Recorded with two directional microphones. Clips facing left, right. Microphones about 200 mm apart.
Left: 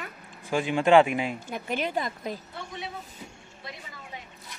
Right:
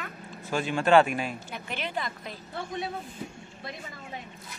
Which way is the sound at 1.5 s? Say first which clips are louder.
Left 5 dB; 45° left (ahead or behind).